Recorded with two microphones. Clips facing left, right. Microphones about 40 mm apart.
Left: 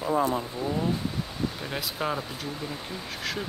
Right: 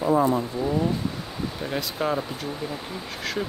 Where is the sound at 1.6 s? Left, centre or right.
Centre.